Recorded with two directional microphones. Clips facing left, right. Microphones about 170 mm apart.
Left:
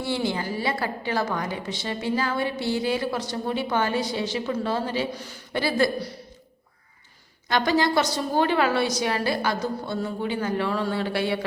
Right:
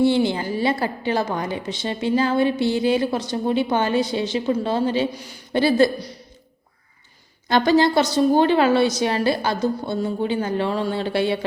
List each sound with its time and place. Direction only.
0.0 s a woman's voice: 25° right (ahead or behind)
5.5 s a woman's voice: 25° right (ahead or behind)
7.4 s a woman's voice: 30° right (ahead or behind)